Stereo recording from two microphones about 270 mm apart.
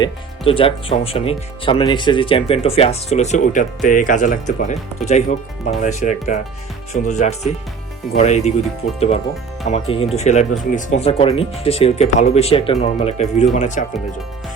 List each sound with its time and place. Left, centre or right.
0.0 s speech: centre